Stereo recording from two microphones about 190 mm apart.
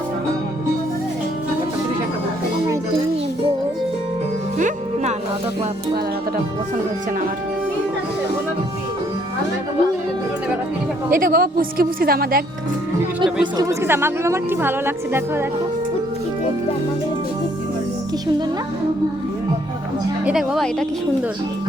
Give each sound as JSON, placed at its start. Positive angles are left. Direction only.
{"t": 4.5, "sound": "music", "side_deg": -40}
{"t": 11.1, "sound": "a woman's voice", "side_deg": -50}
{"t": 13.6, "sound": "a woman's voice", "side_deg": -15}
{"t": 20.2, "sound": "speech", "side_deg": 0}